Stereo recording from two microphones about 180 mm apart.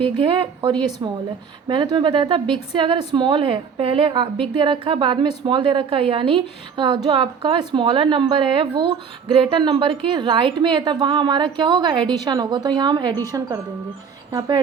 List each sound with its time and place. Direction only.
0.2 s a woman's voice: 25° right (ahead or behind)
14.3 s a woman's voice: 25° right (ahead or behind)